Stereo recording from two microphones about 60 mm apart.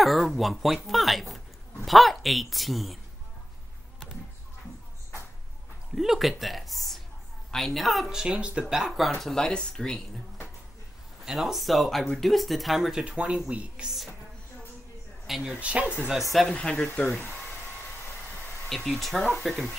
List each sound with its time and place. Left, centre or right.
0.0 s speech: centre
0.8 s a sound: centre
1.9 s speech: centre
5.9 s speech: centre
8.1 s speech: centre
9.2 s speech: centre
11.2 s speech: centre
13.0 s speech: centre
15.2 s speech: centre
15.6 s speech: right
16.1 s speech: centre
16.8 s speech: centre
18.9 s speech: centre